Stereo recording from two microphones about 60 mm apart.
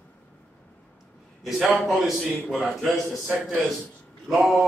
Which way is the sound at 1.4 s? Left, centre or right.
Centre.